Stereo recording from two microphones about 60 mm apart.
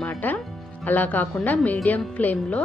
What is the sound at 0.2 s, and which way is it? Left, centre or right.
Music, left.